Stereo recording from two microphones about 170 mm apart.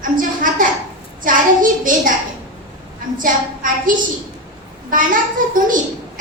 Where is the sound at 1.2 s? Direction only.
50° right (ahead or behind).